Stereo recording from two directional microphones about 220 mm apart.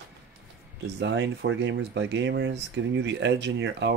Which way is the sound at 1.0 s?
55° right (ahead or behind).